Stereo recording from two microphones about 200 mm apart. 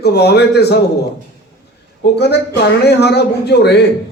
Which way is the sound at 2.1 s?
55° left (ahead or behind).